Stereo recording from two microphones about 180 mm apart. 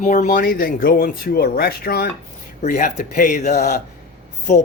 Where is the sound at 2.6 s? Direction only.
45° left (ahead or behind).